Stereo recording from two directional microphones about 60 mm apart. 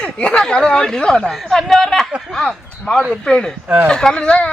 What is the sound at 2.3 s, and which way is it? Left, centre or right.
Speech, centre.